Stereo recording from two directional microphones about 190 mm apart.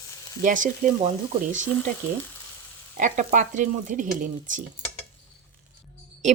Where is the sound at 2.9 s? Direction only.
40° right (ahead or behind).